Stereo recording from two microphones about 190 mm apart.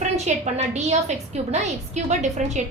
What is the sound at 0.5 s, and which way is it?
A woman's voice, 35° right (ahead or behind).